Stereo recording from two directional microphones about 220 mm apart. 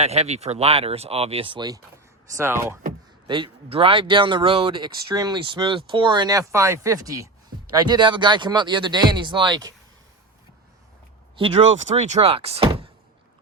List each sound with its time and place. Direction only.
0.0 s speech: 30° right (ahead or behind); by 2.7 s 10° right (ahead or behind)
3.2 s speech: 20° right (ahead or behind)
11.3 s speech: 25° right (ahead or behind)